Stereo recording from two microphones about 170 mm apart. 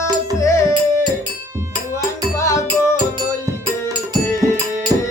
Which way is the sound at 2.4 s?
20° left (ahead or behind).